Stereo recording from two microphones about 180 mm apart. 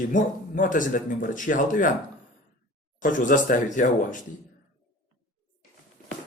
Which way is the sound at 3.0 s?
45° left (ahead or behind).